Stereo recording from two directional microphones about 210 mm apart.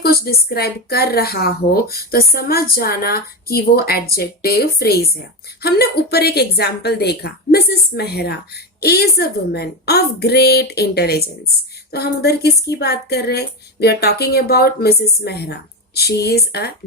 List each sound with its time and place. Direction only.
0.0 s speech: 45° left (ahead or behind)